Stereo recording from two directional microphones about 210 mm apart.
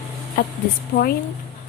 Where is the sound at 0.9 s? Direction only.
40° left (ahead or behind).